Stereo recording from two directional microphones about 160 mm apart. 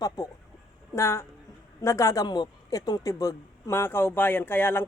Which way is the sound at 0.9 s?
15° left (ahead or behind).